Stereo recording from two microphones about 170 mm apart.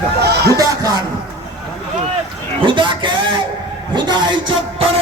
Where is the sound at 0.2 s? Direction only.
75° right (ahead or behind).